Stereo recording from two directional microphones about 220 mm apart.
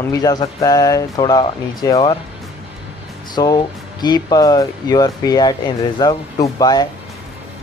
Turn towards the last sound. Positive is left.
turn(degrees=15)  # may be behind; listen again after turning